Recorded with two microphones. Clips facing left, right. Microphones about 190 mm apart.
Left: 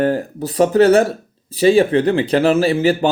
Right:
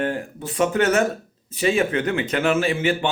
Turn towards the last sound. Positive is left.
turn(degrees=35)  # may be behind; listen again after turning